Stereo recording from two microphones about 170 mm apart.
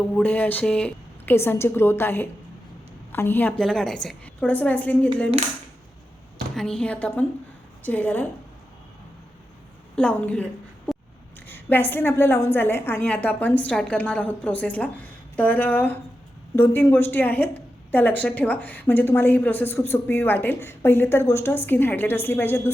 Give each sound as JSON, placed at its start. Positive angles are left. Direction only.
{"t": 0.1, "sound": "a woman's voice", "side_deg": 10}
{"t": 6.6, "sound": "a woman's voice", "side_deg": 5}
{"t": 9.9, "sound": "a woman's voice", "side_deg": 5}
{"t": 11.4, "sound": "a woman's voice", "side_deg": 10}